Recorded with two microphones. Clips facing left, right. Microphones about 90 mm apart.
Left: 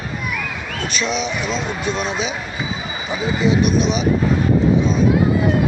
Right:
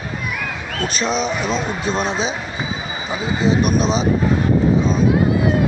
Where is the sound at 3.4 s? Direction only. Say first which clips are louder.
Even; 35° right (ahead or behind).